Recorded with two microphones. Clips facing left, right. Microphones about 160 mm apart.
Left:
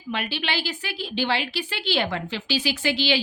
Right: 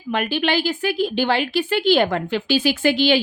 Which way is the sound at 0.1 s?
50° right (ahead or behind).